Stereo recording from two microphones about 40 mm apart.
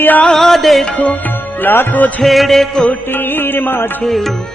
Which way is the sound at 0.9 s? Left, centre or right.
Left.